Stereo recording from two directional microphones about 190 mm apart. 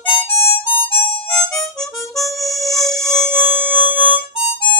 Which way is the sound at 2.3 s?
Centre (ahead or behind).